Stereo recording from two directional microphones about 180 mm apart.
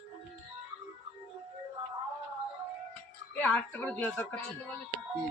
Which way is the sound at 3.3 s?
10° left (ahead or behind).